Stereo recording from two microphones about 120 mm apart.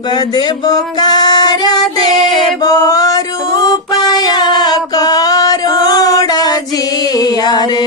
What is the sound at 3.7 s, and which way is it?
Music, 35° left (ahead or behind).